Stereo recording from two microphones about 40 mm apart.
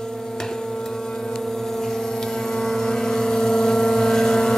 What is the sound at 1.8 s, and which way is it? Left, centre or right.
Vehicle, centre.